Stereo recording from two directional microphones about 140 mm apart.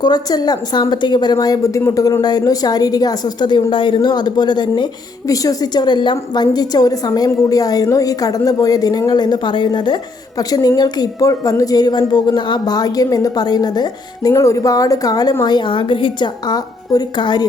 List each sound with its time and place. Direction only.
0.0 s a woman's voice: 30° left (ahead or behind)